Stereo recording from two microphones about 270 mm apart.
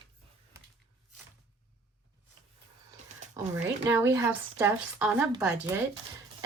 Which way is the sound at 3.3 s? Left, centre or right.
Centre.